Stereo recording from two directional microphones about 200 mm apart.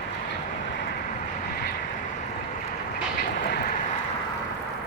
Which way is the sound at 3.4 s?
50° left (ahead or behind).